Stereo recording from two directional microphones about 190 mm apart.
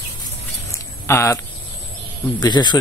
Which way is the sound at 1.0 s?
15° left (ahead or behind).